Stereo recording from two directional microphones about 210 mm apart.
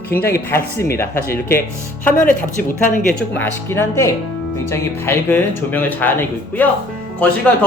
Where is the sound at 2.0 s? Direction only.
40° left (ahead or behind).